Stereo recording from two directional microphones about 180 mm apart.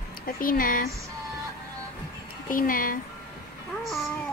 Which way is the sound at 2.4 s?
50° left (ahead or behind).